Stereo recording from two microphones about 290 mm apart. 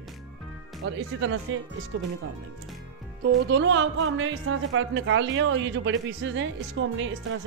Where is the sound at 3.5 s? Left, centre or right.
Right.